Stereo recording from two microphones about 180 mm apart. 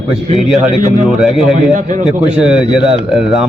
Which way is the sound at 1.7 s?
45° right (ahead or behind).